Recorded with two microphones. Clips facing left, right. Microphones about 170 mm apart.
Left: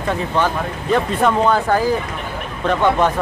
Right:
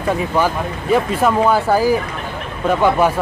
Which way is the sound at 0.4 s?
5° right (ahead or behind).